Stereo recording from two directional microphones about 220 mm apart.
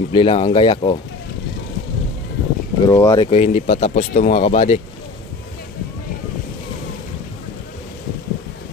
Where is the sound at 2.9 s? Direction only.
15° left (ahead or behind).